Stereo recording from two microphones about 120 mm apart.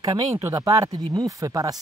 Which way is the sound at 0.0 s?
25° right (ahead or behind).